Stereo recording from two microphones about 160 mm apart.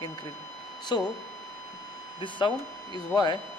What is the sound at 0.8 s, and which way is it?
Speech, 25° left (ahead or behind).